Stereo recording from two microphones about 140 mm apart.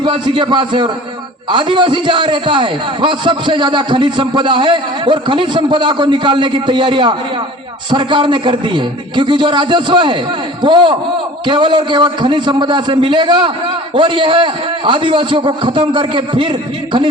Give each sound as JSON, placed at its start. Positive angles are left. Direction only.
{"t": 0.0, "sound": "a man's voice", "side_deg": -35}